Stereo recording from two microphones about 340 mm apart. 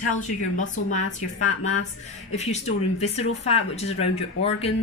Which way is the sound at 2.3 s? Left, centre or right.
Centre.